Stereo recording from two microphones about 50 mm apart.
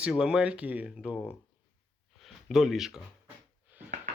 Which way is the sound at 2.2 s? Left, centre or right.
Centre.